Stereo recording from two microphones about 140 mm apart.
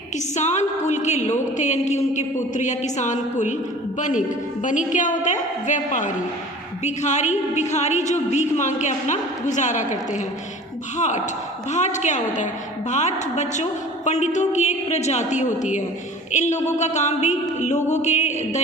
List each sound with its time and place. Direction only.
0.3 s a woman's voice: 55° left (ahead or behind)
4.9 s a woman's voice: 65° left (ahead or behind)